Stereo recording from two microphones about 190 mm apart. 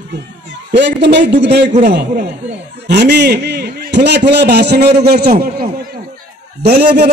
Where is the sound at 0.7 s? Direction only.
65° right (ahead or behind).